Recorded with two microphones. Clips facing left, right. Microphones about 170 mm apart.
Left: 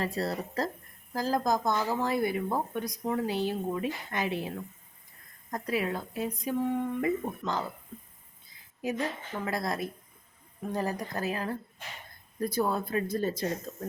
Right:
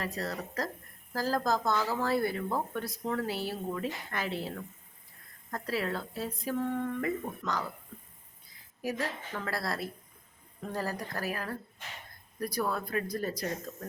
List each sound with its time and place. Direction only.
0.0 s speech: 30° left (ahead or behind)
1.1 s speech: 20° left (ahead or behind)
7.4 s speech: 25° left (ahead or behind)
8.8 s speech: 20° left (ahead or behind)